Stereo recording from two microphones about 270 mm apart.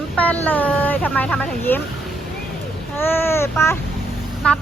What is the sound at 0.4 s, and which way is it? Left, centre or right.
Speech, centre.